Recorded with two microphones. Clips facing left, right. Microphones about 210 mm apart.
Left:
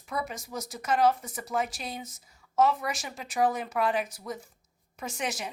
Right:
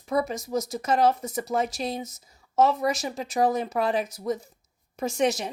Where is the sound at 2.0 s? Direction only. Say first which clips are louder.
Right 6 dB; 20° right (ahead or behind).